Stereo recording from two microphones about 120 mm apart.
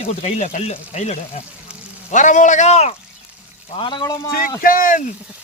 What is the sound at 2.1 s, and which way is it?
Speech, 90° left.